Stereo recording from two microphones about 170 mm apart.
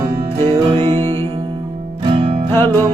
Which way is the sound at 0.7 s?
35° right (ahead or behind).